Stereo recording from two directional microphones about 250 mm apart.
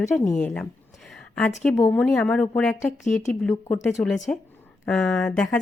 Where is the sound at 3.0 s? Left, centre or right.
Left.